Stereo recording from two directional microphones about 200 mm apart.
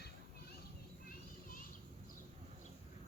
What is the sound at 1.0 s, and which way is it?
Children playing, 45° left (ahead or behind).